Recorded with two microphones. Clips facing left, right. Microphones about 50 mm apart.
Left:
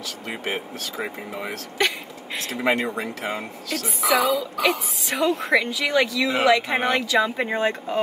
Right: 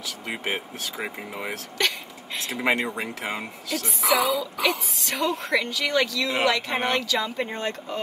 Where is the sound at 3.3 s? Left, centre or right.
Centre.